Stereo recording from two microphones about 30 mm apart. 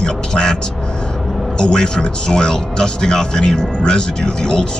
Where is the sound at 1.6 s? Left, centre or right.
Left.